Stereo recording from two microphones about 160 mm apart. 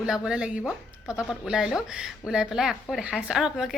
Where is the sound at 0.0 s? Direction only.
5° right (ahead or behind).